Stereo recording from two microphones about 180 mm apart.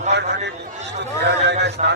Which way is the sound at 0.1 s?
70° right (ahead or behind).